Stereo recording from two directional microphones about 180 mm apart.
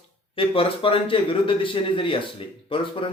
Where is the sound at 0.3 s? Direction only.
30° left (ahead or behind).